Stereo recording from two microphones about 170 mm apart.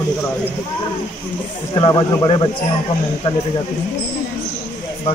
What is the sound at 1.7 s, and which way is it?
Speech, 25° left (ahead or behind).